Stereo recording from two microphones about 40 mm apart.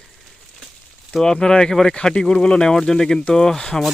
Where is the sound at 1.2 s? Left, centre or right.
Centre.